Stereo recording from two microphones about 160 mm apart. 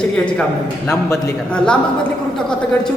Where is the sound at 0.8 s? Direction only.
15° left (ahead or behind).